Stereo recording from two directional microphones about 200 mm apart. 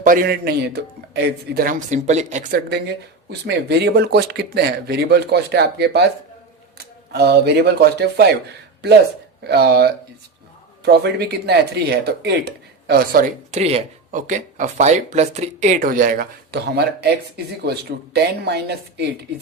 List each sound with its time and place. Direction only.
0.0 s speech: 45° right (ahead or behind)
2.6 s speech: 55° right (ahead or behind)
13.6 s speech: 30° right (ahead or behind); by 19.0 s 55° right (ahead or behind)